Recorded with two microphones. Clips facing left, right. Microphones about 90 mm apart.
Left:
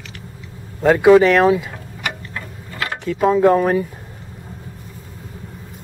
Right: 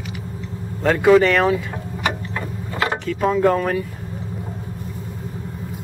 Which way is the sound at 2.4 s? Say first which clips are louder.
Right 4 dB; 20° right (ahead or behind).